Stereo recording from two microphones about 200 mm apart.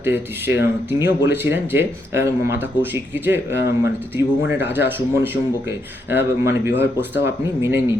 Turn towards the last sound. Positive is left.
turn(degrees=-10)  # may be behind; listen again after turning